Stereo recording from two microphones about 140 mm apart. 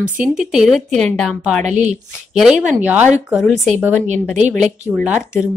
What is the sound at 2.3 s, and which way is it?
Speech, 5° right (ahead or behind).